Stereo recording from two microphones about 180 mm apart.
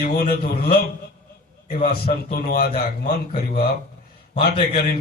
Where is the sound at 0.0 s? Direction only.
55° left (ahead or behind).